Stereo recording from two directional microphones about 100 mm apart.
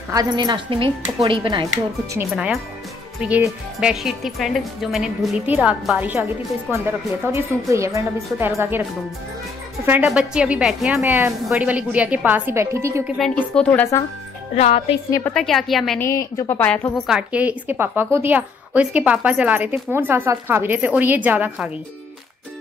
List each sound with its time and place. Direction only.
0.1 s a woman's voice: 40° right (ahead or behind)
0.7 s speech: 65° right (ahead or behind)
2.3 s a woman's voice: 5° right (ahead or behind)
3.8 s a woman's voice: centre (ahead or behind); by 8.8 s 25° right (ahead or behind)
10.0 s a woman's voice: 10° right (ahead or behind)
11.0 s a woman's voice: 25° right (ahead or behind)
11.5 s a woman's voice: 15° right (ahead or behind)
13.4 s a woman's voice: 15° left (ahead or behind)
14.5 s speech: 90° left
15.3 s a woman's voice: centre (ahead or behind)
16.0 s a woman's voice: 30° left (ahead or behind)
16.5 s a woman's voice: 15° left (ahead or behind)
16.9 s a woman's voice: centre (ahead or behind)
17.3 s a woman's voice: 15° right (ahead or behind)